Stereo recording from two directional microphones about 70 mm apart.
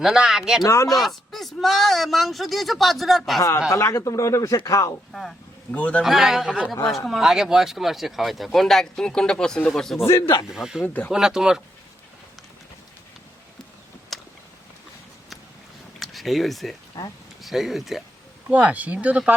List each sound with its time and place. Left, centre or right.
0.0 s speech: centre
0.6 s speech: left
0.9 s speech: centre
3.7 s speech: left
5.7 s speech: left
6.0 s speech: centre
10.5 s speech: centre
10.8 s speech: left
11.1 s speech: centre
14.1 s a sound: centre
16.0 s a sound: centre
17.0 s speech: left
17.4 s speech: centre
18.4 s speech: right